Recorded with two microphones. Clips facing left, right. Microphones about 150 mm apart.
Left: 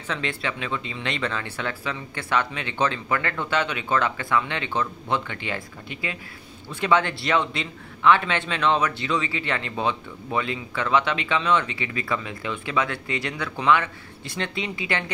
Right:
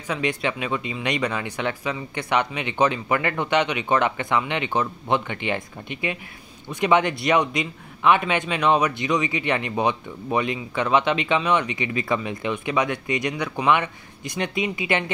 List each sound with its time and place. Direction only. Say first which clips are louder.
0.1 s a man's voice: right 4 dB; 15° right (ahead or behind)